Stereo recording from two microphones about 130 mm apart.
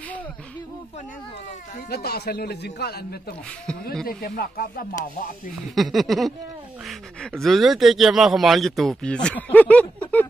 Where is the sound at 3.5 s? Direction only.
5° left (ahead or behind).